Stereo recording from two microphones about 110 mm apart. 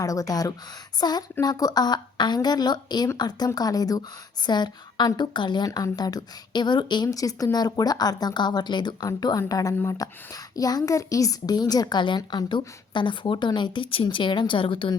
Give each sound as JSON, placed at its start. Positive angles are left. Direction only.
{"t": 0.0, "sound": "a woman's voice", "side_deg": 30}